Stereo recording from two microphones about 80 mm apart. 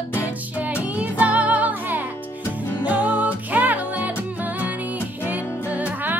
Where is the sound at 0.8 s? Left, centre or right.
Centre.